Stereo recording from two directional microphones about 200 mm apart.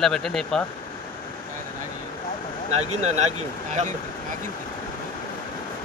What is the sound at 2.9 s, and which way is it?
Speech, 35° right (ahead or behind).